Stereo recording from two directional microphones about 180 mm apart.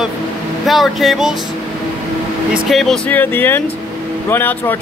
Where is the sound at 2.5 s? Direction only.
Centre (ahead or behind).